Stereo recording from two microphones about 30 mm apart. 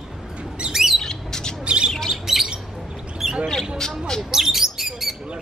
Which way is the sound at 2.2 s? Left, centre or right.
Centre.